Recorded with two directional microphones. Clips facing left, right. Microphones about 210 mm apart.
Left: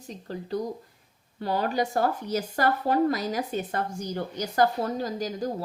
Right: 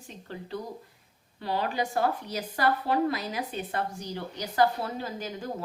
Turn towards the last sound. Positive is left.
turn(degrees=40)  # may be behind; listen again after turning